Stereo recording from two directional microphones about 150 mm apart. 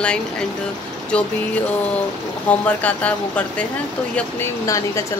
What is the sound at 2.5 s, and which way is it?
Speech, 10° left (ahead or behind).